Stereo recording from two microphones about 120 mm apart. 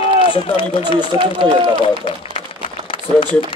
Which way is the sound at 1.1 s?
20° right (ahead or behind).